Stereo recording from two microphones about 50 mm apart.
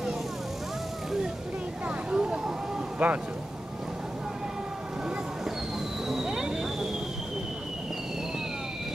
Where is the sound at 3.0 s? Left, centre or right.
Right.